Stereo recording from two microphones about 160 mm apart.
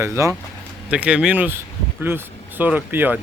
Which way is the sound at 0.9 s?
5° right (ahead or behind).